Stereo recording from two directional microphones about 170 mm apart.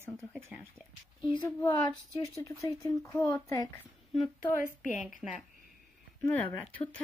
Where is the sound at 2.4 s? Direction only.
15° left (ahead or behind).